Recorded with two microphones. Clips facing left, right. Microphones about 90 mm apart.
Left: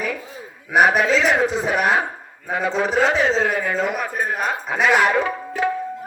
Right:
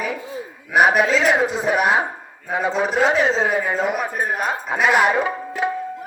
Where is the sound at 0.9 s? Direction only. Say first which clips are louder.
Right 1 dB; centre (ahead or behind).